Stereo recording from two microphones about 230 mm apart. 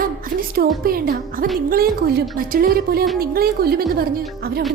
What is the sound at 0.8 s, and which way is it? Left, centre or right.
A woman's voice, right.